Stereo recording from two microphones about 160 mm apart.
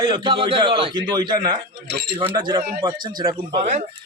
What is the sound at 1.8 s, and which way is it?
Speech, 90° right.